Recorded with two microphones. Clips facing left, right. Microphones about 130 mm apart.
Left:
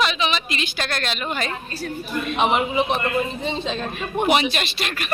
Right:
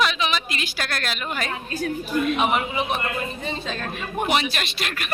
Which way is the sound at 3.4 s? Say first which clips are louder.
Left 4 dB; 25° left (ahead or behind).